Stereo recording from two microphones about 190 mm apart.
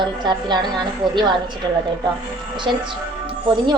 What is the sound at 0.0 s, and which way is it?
A woman's voice, 25° right (ahead or behind).